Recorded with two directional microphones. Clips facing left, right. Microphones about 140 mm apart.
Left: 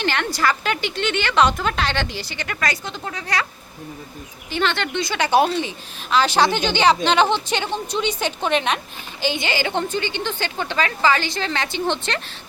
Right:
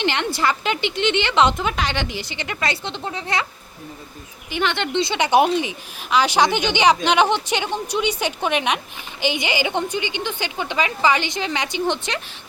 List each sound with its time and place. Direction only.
0.0 s a woman's voice: 20° right (ahead or behind)
4.5 s a woman's voice: 15° right (ahead or behind)